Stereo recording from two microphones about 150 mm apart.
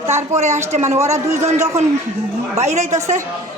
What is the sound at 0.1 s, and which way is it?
Speech, 50° right (ahead or behind).